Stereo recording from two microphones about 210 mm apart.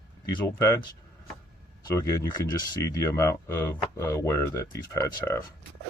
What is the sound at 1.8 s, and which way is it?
Speech, 15° left (ahead or behind).